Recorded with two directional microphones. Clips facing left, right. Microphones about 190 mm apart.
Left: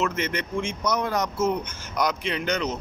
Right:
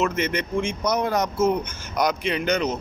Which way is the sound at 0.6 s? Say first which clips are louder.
Right 2 dB; 50° right (ahead or behind).